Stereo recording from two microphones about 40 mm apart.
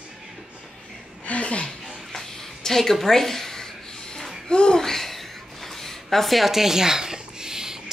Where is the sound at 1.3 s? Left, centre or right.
Left.